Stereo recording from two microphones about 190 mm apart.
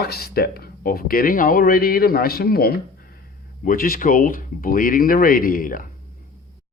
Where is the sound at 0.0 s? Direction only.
55° left (ahead or behind).